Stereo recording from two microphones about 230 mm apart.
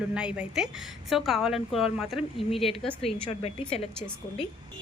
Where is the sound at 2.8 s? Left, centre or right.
Left.